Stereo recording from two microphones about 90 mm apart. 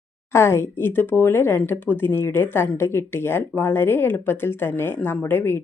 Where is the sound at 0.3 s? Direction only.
30° left (ahead or behind).